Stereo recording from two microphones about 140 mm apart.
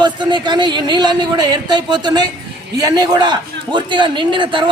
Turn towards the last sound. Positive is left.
turn(degrees=-35)  # may be behind; listen again after turning